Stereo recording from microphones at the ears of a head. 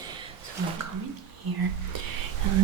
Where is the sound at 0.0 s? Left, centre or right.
Right.